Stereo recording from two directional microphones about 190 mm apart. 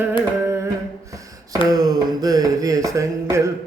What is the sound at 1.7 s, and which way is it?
Mantra, 20° right (ahead or behind).